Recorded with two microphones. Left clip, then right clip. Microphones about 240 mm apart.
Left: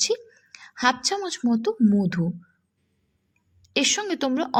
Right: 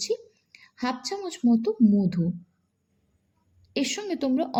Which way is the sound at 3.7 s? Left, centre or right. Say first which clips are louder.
Left 6 dB; left.